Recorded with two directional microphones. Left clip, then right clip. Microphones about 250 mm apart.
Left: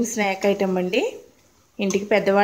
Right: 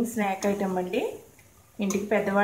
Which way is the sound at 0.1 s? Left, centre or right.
Left.